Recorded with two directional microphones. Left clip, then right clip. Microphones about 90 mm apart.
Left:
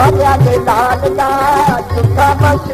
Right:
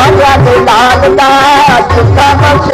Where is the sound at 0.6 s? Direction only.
40° right (ahead or behind).